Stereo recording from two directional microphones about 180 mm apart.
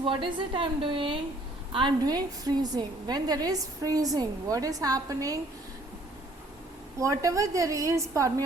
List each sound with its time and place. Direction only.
0.0 s a woman's voice: 30° right (ahead or behind)
7.0 s a woman's voice: 20° right (ahead or behind)